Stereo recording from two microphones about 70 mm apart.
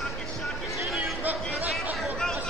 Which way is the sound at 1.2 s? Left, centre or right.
Right.